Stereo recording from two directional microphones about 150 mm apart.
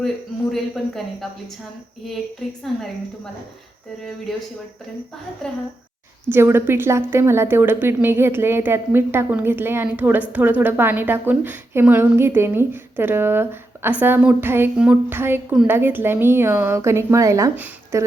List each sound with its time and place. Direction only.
0.5 s a woman's voice: centre (ahead or behind)
2.7 s a woman's voice: centre (ahead or behind)
6.2 s speech: 15° right (ahead or behind)